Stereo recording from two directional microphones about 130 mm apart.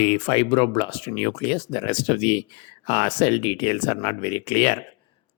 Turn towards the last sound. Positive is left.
turn(degrees=55)  # may be behind; listen again after turning